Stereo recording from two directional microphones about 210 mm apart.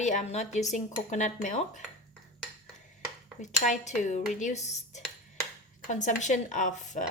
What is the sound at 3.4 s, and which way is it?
Speech, 35° left (ahead or behind).